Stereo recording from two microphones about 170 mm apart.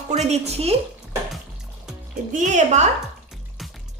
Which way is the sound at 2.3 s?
45° right (ahead or behind).